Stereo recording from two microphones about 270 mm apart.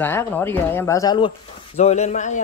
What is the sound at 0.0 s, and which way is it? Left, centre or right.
Speech, centre.